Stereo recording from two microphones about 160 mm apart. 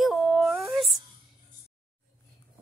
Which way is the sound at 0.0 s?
5° right (ahead or behind).